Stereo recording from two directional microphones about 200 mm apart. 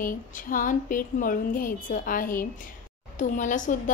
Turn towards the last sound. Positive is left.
turn(degrees=40)  # may be behind; listen again after turning